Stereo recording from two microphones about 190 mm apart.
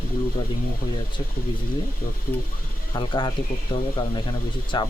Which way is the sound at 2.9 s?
25° left (ahead or behind).